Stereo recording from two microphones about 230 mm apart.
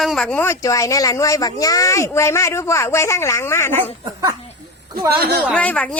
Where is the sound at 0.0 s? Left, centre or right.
Centre.